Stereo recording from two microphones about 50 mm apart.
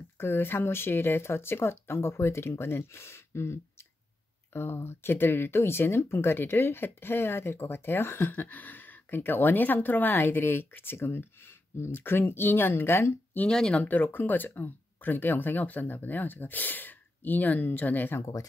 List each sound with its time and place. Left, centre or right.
0.2 s speech: left
4.6 s speech: left
13.5 s speech: centre
13.7 s speech: left